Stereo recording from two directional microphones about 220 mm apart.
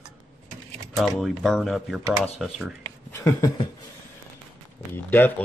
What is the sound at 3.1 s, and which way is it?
Speech, 15° left (ahead or behind).